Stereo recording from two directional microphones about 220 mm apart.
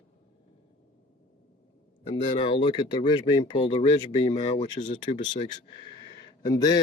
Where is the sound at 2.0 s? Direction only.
25° left (ahead or behind).